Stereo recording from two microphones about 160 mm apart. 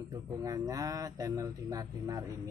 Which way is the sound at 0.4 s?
20° right (ahead or behind).